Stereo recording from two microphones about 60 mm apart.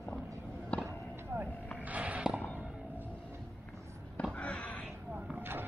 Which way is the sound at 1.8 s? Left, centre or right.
Right.